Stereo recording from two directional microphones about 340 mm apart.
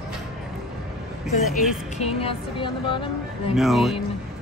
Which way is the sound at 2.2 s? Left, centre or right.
Centre.